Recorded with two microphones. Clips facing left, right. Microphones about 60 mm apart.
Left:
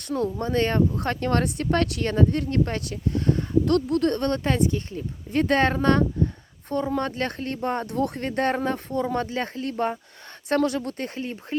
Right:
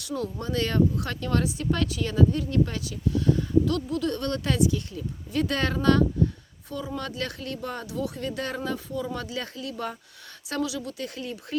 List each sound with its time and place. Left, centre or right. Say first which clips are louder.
0.0 s speech: left 5 dB; left